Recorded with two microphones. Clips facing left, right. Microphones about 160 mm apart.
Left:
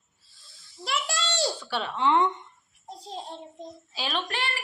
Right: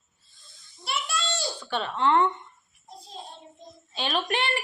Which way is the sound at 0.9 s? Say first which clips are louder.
Left 1 dB; 90° left.